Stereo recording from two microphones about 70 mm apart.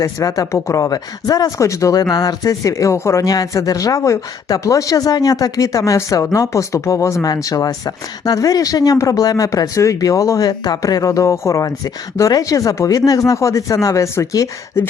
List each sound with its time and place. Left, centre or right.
0.0 s speech: left
2.0 s speech: left
3.2 s speech: left